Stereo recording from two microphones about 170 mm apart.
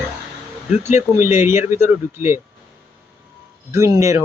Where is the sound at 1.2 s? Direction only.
15° right (ahead or behind).